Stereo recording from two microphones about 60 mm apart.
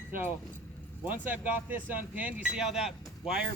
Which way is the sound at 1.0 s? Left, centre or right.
Right.